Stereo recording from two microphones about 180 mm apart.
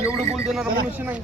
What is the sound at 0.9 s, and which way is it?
Speech, 10° right (ahead or behind).